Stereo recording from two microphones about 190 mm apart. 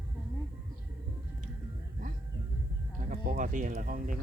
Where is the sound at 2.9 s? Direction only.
45° right (ahead or behind).